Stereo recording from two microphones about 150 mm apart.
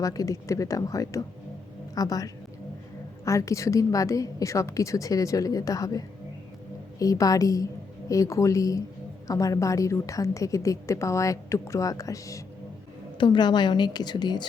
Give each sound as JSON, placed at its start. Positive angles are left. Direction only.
{"t": 0.0, "sound": "a woman's voice", "side_deg": 25}
{"t": 13.1, "sound": "a woman's voice", "side_deg": 30}